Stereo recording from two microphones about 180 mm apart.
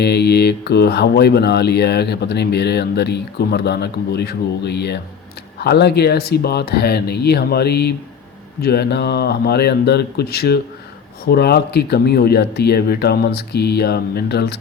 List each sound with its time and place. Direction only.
0.0 s speech: 65° left (ahead or behind)